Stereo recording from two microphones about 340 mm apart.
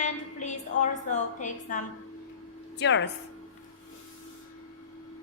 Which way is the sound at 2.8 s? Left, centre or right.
Left.